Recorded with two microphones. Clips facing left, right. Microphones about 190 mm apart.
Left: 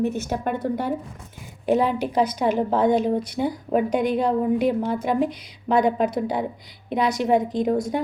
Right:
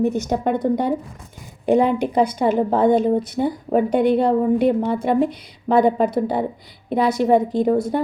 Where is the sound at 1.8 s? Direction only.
5° left (ahead or behind).